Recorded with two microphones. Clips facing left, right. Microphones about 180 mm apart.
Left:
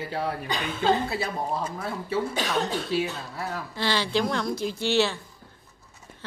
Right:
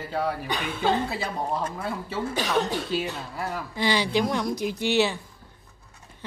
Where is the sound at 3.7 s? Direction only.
15° right (ahead or behind).